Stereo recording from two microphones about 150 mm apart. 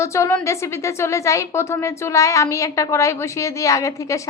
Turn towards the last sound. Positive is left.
turn(degrees=20)  # may be behind; listen again after turning